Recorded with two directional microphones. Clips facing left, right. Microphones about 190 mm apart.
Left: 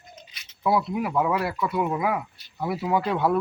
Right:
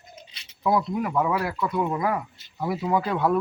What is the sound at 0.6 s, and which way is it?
Speech, 5° left (ahead or behind).